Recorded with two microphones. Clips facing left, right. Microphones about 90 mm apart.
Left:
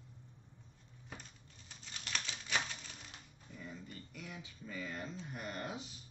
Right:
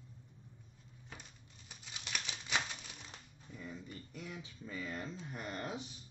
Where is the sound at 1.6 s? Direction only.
15° right (ahead or behind).